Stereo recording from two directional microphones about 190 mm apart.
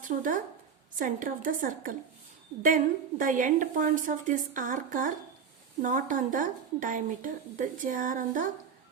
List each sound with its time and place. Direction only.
0.0 s speech: 45° right (ahead or behind)